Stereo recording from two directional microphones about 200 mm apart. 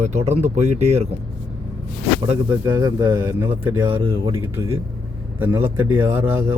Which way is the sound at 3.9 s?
25° right (ahead or behind).